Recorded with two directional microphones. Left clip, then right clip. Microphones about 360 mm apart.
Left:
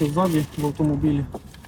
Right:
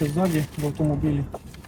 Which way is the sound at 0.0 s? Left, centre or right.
Centre.